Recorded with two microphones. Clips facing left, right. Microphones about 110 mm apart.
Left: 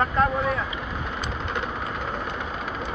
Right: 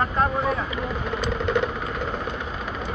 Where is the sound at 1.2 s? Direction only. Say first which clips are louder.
Right 9 dB; 40° left (ahead or behind).